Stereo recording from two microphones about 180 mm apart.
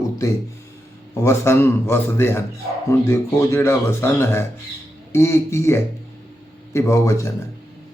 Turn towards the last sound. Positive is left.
turn(degrees=15)  # may be behind; listen again after turning